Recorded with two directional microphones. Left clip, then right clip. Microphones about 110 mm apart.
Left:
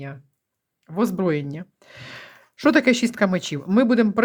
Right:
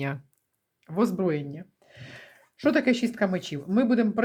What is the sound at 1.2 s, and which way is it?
Speech, 45° left (ahead or behind).